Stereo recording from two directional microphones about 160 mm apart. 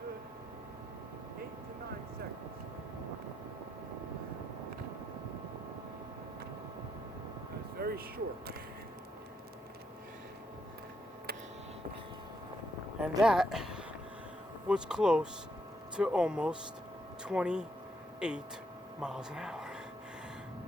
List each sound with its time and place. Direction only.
7.8 s speech: 70° right (ahead or behind)
13.0 s speech: 5° right (ahead or behind)